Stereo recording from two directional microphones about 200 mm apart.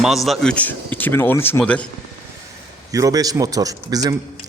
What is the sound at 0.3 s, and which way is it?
Speech, 5° left (ahead or behind).